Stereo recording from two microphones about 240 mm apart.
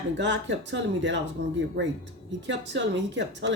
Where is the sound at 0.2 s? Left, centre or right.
Right.